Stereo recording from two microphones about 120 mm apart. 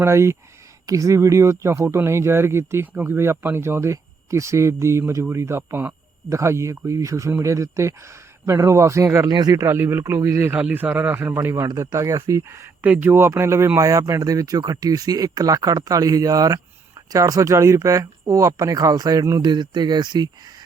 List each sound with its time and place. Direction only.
0.0 s a man's voice: 20° right (ahead or behind)